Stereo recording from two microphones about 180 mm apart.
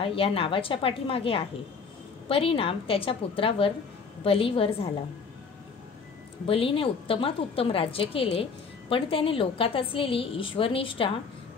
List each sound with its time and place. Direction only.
0.0 s a woman's voice: 30° left (ahead or behind)
6.4 s a woman's voice: 30° left (ahead or behind)